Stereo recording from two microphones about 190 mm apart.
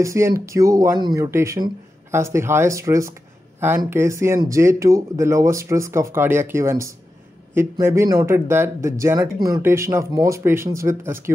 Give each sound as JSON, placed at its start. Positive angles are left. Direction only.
{"t": 0.0, "sound": "speech", "side_deg": -15}